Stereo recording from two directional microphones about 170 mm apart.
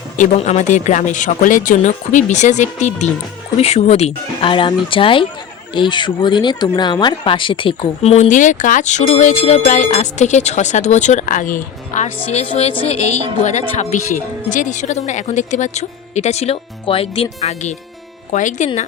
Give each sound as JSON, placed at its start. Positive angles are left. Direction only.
{"t": 0.2, "sound": "speech", "side_deg": 40}